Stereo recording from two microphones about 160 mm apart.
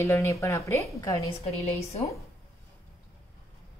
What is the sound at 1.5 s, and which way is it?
Speech, 40° left (ahead or behind).